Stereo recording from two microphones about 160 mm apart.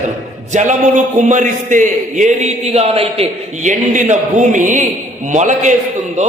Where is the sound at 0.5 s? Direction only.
50° right (ahead or behind).